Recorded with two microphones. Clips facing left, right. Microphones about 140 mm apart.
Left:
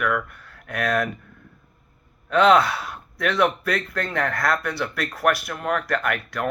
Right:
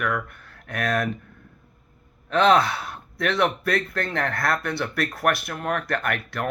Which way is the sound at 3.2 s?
25° right (ahead or behind).